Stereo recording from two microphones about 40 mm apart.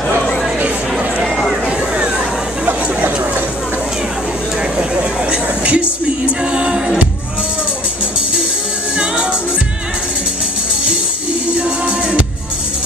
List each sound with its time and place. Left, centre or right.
0.9 s a sound: centre
1.7 s vehicle: right
2.6 s chatter: right
4.7 s music: right
8.9 s music: right
11.4 s music: right